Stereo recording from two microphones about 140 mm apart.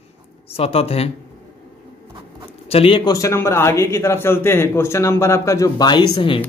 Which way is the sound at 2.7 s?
40° left (ahead or behind).